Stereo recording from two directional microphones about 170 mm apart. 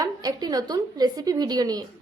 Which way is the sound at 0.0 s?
25° right (ahead or behind).